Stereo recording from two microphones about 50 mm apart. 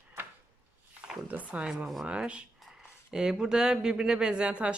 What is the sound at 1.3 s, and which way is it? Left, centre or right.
Speech, right.